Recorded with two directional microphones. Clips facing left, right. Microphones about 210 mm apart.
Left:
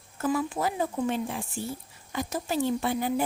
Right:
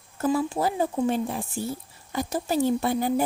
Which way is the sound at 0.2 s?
30° right (ahead or behind).